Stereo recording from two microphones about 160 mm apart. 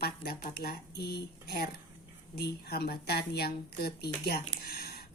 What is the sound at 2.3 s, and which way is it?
Speech, 80° left.